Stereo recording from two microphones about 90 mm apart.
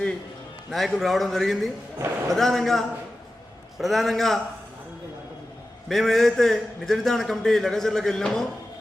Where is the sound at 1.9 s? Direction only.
35° right (ahead or behind).